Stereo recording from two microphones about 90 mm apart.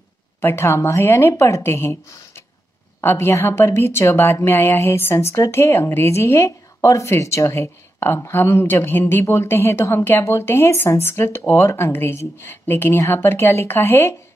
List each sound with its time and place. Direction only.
0.4 s a woman's voice: 25° left (ahead or behind)